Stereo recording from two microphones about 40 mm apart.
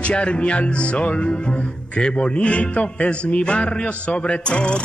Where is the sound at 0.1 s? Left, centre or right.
Left.